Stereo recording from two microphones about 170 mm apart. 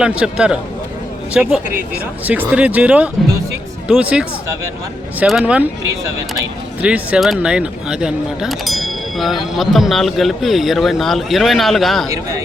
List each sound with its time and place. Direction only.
0.0 s speech: 5° right (ahead or behind)
6.8 s speech: 5° right (ahead or behind)
12.0 s a man's voice: 20° right (ahead or behind)